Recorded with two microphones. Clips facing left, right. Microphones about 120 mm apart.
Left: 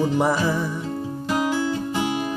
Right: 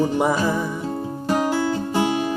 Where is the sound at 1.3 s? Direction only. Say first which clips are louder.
Right 2 dB; 40° right (ahead or behind).